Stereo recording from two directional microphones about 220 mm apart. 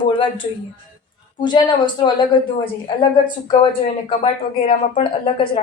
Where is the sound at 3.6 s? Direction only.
25° left (ahead or behind).